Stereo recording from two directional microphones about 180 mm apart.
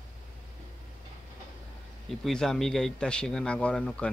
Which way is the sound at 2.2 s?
5° left (ahead or behind).